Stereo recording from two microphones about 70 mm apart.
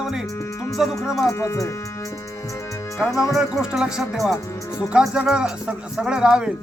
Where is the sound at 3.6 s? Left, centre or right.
Centre.